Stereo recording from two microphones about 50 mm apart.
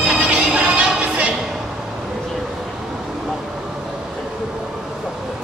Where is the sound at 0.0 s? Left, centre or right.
Centre.